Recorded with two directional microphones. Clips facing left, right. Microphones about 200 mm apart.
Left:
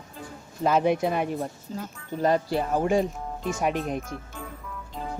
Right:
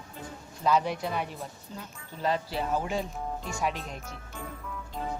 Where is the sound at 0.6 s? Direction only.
55° left (ahead or behind).